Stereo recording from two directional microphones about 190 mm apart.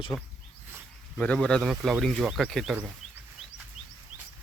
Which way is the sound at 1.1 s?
5° left (ahead or behind).